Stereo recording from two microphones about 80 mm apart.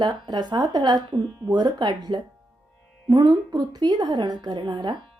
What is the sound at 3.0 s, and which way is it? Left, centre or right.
Speech, right.